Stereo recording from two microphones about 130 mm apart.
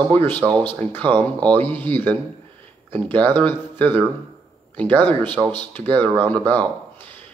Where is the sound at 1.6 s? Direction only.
15° left (ahead or behind).